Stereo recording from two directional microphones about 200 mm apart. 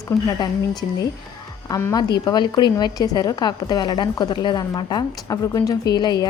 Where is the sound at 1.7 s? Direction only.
15° left (ahead or behind).